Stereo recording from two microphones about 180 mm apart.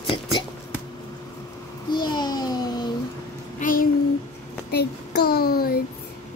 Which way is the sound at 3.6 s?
50° left (ahead or behind).